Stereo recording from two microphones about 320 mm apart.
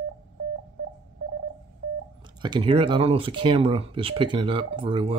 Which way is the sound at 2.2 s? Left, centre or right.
Centre.